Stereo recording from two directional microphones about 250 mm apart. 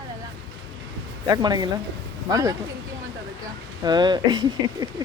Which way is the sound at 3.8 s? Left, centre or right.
Centre.